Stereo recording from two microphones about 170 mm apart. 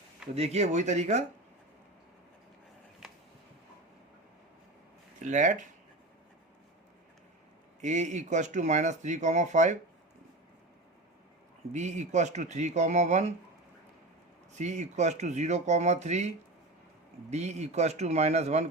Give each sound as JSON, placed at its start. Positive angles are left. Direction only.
{"t": 0.3, "sound": "speech", "side_deg": -40}
{"t": 5.2, "sound": "speech", "side_deg": -45}
{"t": 7.8, "sound": "speech", "side_deg": -45}
{"t": 11.7, "sound": "speech", "side_deg": -45}
{"t": 14.6, "sound": "speech", "side_deg": -45}
{"t": 17.3, "sound": "speech", "side_deg": -40}